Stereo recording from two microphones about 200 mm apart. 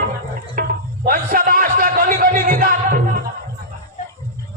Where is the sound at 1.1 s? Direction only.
45° right (ahead or behind).